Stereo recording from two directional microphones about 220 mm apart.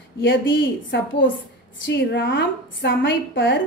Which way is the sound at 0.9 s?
50° left (ahead or behind).